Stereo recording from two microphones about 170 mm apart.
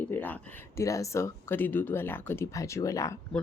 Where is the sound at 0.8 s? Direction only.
20° left (ahead or behind).